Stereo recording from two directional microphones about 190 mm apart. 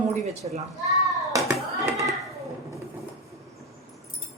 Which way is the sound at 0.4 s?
35° right (ahead or behind).